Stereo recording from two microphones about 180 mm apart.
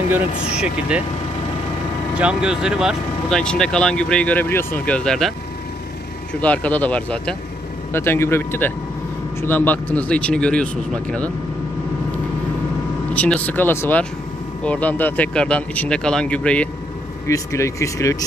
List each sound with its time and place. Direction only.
0.6 s speech: 5° right (ahead or behind)
2.1 s speech: 5° right (ahead or behind)
6.4 s speech: 10° left (ahead or behind)
13.1 s speech: 10° left (ahead or behind)
17.3 s speech: 15° left (ahead or behind)